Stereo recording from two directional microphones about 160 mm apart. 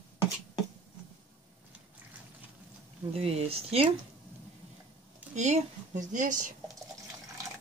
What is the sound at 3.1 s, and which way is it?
Speech, 40° right (ahead or behind).